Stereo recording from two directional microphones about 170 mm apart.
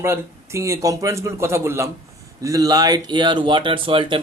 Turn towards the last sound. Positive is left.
turn(degrees=-30)  # may be behind; listen again after turning